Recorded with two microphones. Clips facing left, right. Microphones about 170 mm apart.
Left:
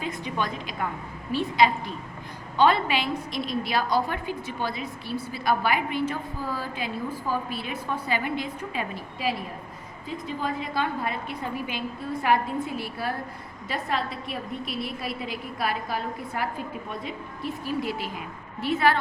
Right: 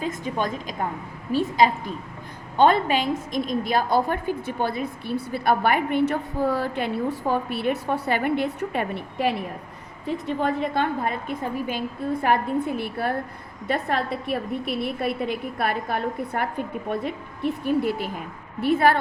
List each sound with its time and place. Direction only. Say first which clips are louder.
0.0 s a woman's voice: right 3 dB; 40° right (ahead or behind)